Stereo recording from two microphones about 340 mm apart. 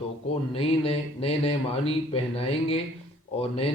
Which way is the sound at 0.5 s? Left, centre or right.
Centre.